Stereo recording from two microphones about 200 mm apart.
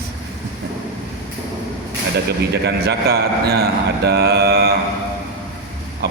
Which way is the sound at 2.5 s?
55° right (ahead or behind).